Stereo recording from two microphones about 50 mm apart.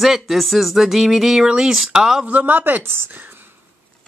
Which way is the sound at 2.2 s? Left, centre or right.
Right.